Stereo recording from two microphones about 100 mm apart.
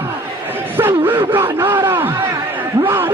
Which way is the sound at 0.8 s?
20° right (ahead or behind).